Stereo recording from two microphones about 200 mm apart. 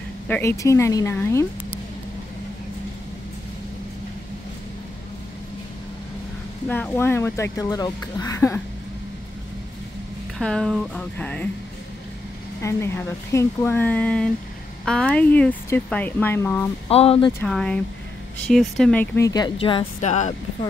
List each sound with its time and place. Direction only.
0.3 s speech: 10° left (ahead or behind)
6.7 s speech: 10° left (ahead or behind)
10.4 s speech: 5° left (ahead or behind)
12.6 s speech: 15° left (ahead or behind)
16.9 s speech: 30° left (ahead or behind)
17.4 s speech: 5° left (ahead or behind); by 20.3 s 35° left (ahead or behind)